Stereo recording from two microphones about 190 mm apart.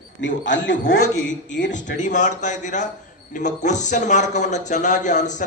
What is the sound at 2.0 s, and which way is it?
A man's voice, 40° left (ahead or behind).